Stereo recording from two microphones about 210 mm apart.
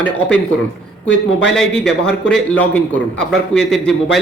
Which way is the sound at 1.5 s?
5° left (ahead or behind).